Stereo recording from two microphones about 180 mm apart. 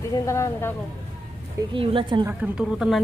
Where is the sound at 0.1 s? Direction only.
15° left (ahead or behind).